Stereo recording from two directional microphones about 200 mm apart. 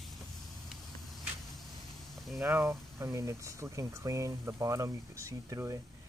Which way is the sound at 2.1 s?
Centre (ahead or behind).